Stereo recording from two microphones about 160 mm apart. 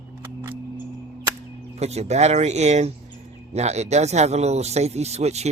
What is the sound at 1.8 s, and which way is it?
Speech, 45° right (ahead or behind).